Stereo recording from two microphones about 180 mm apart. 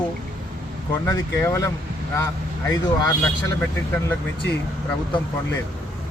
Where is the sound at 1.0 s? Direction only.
15° left (ahead or behind).